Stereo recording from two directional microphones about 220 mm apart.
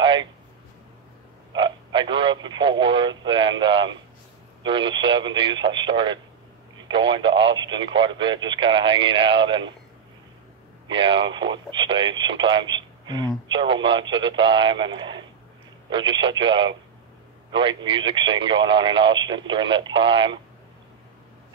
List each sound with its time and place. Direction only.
0.0 s a sound: 20° right (ahead or behind)
1.5 s radio: 20° right (ahead or behind)
4.6 s speech: 20° right (ahead or behind)
10.9 s a man's voice: 20° right (ahead or behind)